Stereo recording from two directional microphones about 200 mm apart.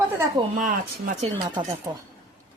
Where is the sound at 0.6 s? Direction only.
40° right (ahead or behind).